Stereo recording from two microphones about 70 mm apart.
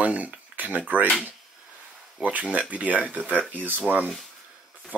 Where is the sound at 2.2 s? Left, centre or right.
Right.